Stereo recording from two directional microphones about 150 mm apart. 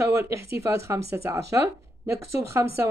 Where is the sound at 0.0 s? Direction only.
20° right (ahead or behind).